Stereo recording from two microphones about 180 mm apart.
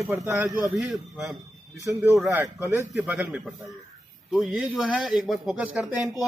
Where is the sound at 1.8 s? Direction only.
15° right (ahead or behind).